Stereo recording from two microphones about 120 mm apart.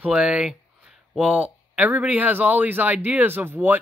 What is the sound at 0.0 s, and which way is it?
Speech, 5° right (ahead or behind).